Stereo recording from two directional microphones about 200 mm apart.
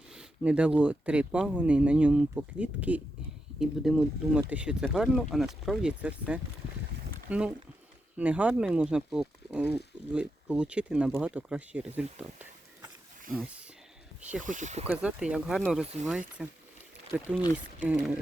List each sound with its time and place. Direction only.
0.1 s speech: 5° right (ahead or behind)
11.9 s a sound: 5° right (ahead or behind)
13.3 s speech: 5° right (ahead or behind)
14.4 s speech: 40° right (ahead or behind)
14.8 s speech: 5° right (ahead or behind)